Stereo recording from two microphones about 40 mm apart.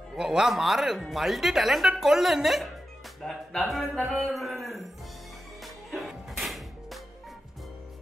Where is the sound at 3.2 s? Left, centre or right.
Centre.